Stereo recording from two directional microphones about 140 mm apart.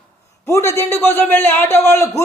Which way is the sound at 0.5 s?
20° left (ahead or behind).